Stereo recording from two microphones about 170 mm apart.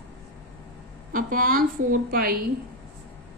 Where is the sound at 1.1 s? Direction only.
55° right (ahead or behind).